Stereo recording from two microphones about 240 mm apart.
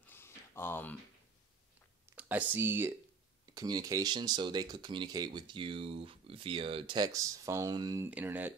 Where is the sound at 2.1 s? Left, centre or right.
Centre.